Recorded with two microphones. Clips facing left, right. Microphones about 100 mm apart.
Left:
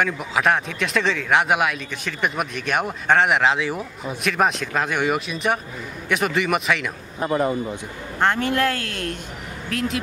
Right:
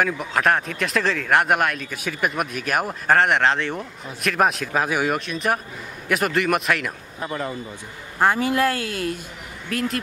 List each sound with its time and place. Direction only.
0.0 s speech: centre (ahead or behind)
7.2 s speech: 25° left (ahead or behind)
8.2 s speech: 5° right (ahead or behind)